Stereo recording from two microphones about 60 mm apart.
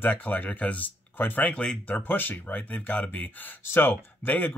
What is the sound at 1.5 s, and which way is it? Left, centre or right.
Speech, centre.